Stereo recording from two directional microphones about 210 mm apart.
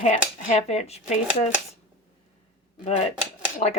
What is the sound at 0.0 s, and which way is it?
Speech, 35° left (ahead or behind).